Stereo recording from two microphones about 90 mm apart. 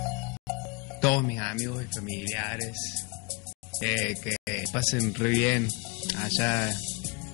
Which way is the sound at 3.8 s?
15° left (ahead or behind).